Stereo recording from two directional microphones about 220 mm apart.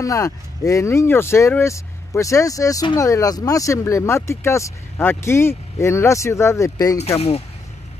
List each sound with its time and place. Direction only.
0.0 s speech: 15° left (ahead or behind)
7.0 s speech: 30° left (ahead or behind)